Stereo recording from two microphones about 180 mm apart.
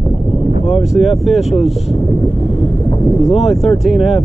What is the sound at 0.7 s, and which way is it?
Speech, centre (ahead or behind).